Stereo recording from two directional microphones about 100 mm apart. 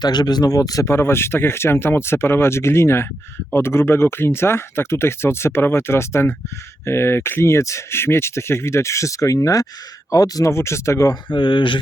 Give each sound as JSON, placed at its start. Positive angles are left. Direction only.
{"t": 0.0, "sound": "speech", "side_deg": 45}
{"t": 11.3, "sound": "speech", "side_deg": 55}